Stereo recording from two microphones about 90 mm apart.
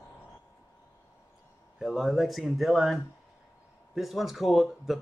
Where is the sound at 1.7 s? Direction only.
5° right (ahead or behind).